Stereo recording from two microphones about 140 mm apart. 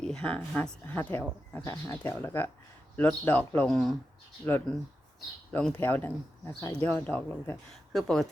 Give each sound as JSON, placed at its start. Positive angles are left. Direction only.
{"t": 0.0, "sound": "speech", "side_deg": 5}
{"t": 1.7, "sound": "speech", "side_deg": 25}
{"t": 3.7, "sound": "speech", "side_deg": 0}
{"t": 4.4, "sound": "speech", "side_deg": 15}